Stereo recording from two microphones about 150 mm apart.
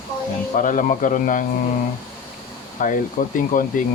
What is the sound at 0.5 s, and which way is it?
Speech, 60° left (ahead or behind).